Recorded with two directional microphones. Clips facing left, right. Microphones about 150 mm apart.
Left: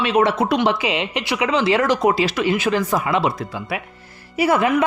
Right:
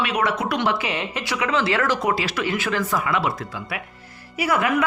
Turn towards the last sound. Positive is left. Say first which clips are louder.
# left 5 dB
turn(degrees=25)  # may be behind; listen again after turning